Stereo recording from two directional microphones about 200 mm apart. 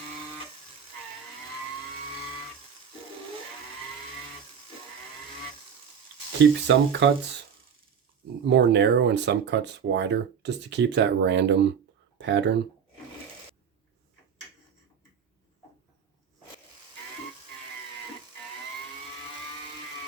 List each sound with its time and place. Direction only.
6.4 s speech: 60° right (ahead or behind)
8.4 s speech: 60° right (ahead or behind)